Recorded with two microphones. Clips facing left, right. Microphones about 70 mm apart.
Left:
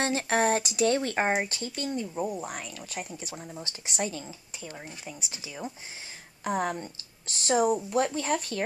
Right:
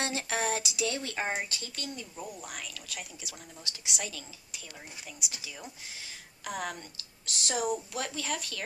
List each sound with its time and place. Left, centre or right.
0.0 s speech: left